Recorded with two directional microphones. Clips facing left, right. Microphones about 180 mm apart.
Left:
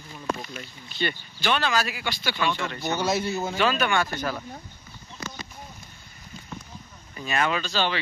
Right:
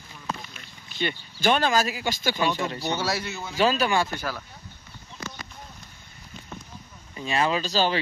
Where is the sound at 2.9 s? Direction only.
20° left (ahead or behind).